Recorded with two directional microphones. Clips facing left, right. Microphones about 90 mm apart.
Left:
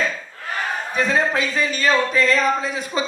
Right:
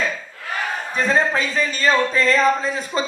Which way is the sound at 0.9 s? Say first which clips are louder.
Right 1 dB; 35° right (ahead or behind).